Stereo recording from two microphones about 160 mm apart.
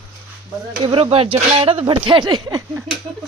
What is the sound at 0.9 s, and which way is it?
Speech, 35° right (ahead or behind).